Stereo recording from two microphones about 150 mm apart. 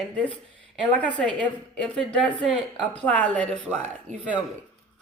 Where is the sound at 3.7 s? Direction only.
50° right (ahead or behind).